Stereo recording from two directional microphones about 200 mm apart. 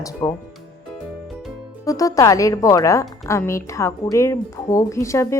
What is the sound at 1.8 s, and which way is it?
A woman's voice, 15° left (ahead or behind).